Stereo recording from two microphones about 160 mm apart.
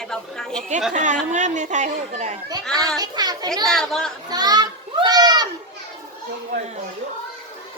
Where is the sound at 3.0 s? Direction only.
25° right (ahead or behind).